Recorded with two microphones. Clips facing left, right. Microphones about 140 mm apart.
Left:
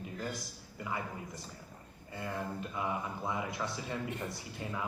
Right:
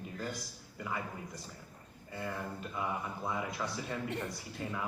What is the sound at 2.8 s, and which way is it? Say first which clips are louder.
A man's voice: even; 20° left (ahead or behind).